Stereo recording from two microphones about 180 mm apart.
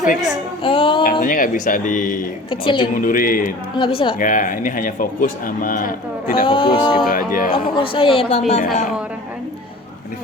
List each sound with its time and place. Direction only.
0.6 s music: 30° left (ahead or behind)
1.2 s speech: 50° left (ahead or behind)
2.5 s music: 30° left (ahead or behind)
2.9 s speech: 50° left (ahead or behind)
3.8 s music: 30° left (ahead or behind)
4.2 s speech: 45° left (ahead or behind)
6.4 s music: 30° left (ahead or behind)
6.7 s speech: 5° right (ahead or behind)
7.1 s speech: 50° left (ahead or behind)
7.8 s a woman's voice: 30° left (ahead or behind)